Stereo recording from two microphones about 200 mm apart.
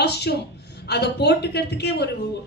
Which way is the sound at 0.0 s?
55° left (ahead or behind).